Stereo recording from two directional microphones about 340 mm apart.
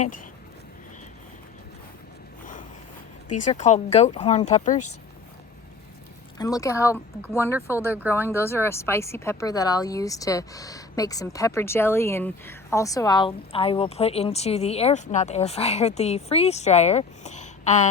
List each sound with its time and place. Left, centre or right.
3.3 s speech: left
6.4 s speech: centre